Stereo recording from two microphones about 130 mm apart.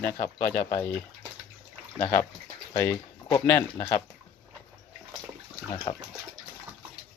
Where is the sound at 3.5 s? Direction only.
20° left (ahead or behind).